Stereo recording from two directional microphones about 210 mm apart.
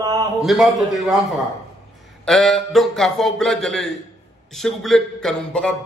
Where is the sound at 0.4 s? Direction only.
Centre (ahead or behind).